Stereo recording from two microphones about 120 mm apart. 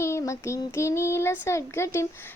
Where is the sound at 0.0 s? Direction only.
25° left (ahead or behind).